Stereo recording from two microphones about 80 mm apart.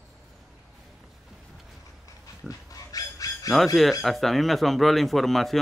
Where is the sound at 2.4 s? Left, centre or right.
Left.